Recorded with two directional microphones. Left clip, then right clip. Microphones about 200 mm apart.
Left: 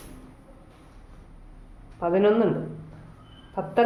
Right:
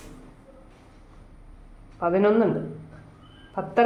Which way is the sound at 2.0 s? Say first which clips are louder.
Even; 10° right (ahead or behind).